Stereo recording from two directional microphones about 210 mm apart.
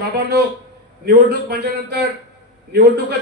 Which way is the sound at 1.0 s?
50° right (ahead or behind).